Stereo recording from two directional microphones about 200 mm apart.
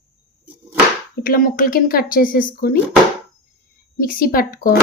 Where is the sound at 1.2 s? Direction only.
45° left (ahead or behind).